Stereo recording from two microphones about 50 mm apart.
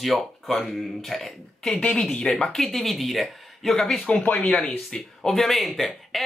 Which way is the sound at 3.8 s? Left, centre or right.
Centre.